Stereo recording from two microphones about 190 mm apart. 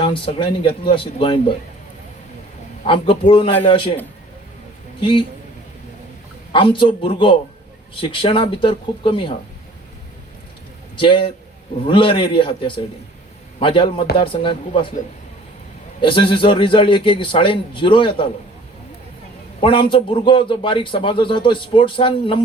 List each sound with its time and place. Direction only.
0.0 s a man's voice: 30° left (ahead or behind)
2.8 s a man's voice: 30° left (ahead or behind)
4.9 s a man's voice: 25° left (ahead or behind)
6.5 s a man's voice: 25° left (ahead or behind)
10.9 s a man's voice: 25° left (ahead or behind)
16.0 s a man's voice: 25° left (ahead or behind)
19.5 s a man's voice: 25° left (ahead or behind)